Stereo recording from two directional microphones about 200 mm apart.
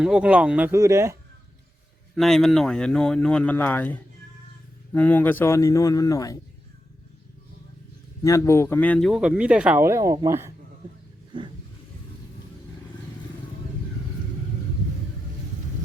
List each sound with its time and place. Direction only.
0.0 s speech: 5° right (ahead or behind)
2.1 s a man's voice: centre (ahead or behind); by 6.4 s 15° left (ahead or behind)
8.2 s a man's voice: 15° left (ahead or behind); by 10.5 s 15° right (ahead or behind)